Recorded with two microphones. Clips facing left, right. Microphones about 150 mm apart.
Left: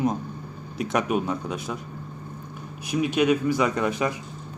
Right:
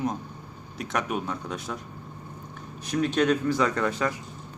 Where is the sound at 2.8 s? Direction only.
10° left (ahead or behind).